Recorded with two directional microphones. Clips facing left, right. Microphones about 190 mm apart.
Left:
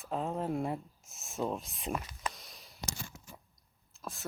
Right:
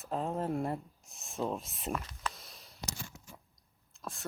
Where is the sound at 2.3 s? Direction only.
Centre (ahead or behind).